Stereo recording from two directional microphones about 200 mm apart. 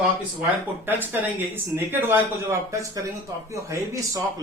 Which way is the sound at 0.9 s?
10° right (ahead or behind).